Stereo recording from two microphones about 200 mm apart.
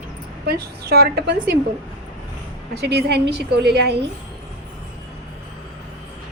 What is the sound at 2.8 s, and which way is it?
A woman's voice, 55° right (ahead or behind).